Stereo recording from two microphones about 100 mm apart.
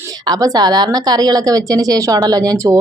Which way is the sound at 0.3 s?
40° right (ahead or behind).